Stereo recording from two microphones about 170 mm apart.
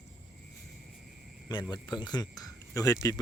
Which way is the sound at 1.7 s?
25° left (ahead or behind).